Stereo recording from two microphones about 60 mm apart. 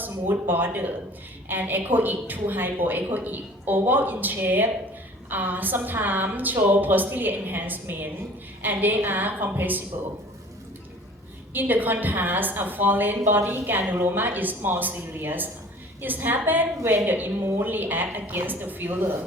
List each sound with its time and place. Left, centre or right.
0.0 s a woman's voice: right
11.5 s a woman's voice: right